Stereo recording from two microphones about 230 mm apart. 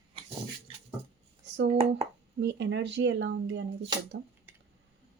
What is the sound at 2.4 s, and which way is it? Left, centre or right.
Speech, right.